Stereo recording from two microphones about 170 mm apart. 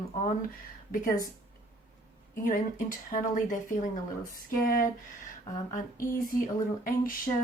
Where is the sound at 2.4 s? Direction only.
55° left (ahead or behind).